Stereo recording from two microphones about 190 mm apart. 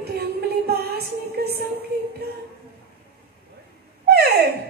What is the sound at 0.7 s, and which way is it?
Music, 55° right (ahead or behind).